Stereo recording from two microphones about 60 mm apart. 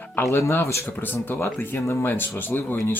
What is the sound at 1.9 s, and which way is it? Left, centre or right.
Speech, left.